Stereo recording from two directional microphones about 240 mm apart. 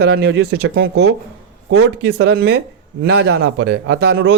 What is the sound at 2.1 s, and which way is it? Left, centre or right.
Speech, right.